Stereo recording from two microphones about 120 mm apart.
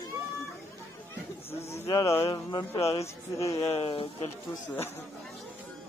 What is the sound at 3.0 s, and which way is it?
Speech, 25° left (ahead or behind).